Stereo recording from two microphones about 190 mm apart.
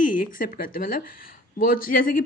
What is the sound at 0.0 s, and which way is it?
A woman's voice, 45° left (ahead or behind).